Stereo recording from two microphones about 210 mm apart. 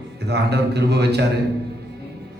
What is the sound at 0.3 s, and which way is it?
Speech, 50° right (ahead or behind).